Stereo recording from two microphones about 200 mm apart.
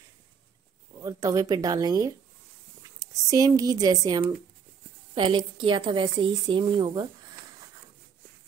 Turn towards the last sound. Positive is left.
turn(degrees=-20)  # may be behind; listen again after turning